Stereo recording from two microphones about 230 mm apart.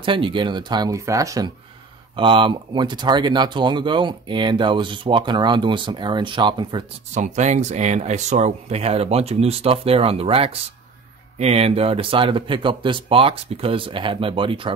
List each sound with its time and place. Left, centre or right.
0.0 s speech: right
7.2 s speech: right